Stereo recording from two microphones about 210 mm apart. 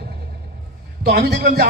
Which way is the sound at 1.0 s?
50° right (ahead or behind).